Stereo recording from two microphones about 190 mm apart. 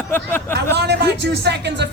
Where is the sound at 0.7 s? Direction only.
60° right (ahead or behind).